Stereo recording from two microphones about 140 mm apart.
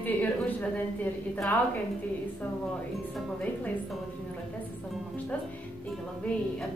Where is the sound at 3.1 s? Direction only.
10° left (ahead or behind).